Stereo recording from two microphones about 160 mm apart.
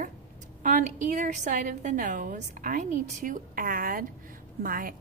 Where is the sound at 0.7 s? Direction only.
55° right (ahead or behind).